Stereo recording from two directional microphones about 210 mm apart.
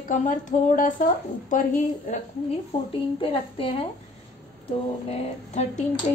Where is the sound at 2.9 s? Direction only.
25° left (ahead or behind).